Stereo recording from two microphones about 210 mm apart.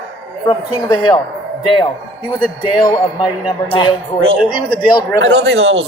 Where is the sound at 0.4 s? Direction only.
20° left (ahead or behind).